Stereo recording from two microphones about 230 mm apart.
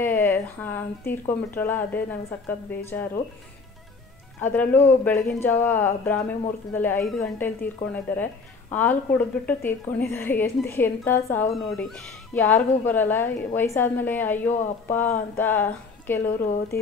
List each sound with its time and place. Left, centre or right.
0.0 s a woman's voice: centre
4.4 s a woman's voice: centre